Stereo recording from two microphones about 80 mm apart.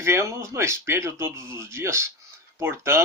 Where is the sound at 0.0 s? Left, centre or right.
Right.